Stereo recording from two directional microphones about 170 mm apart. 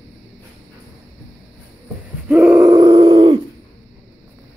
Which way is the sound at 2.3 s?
10° right (ahead or behind).